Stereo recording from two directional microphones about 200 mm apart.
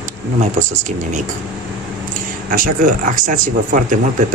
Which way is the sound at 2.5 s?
45° right (ahead or behind).